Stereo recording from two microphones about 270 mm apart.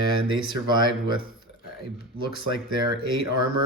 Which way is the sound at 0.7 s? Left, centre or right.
Centre.